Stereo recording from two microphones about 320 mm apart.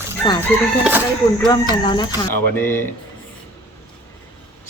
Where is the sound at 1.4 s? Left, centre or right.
Centre.